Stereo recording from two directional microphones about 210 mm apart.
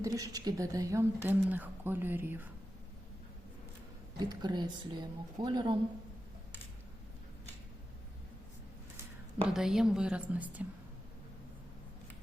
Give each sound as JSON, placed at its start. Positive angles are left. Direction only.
{"t": 0.0, "sound": "a woman's voice", "side_deg": -15}
{"t": 4.2, "sound": "a woman's voice", "side_deg": -20}
{"t": 9.5, "sound": "a woman's voice", "side_deg": 0}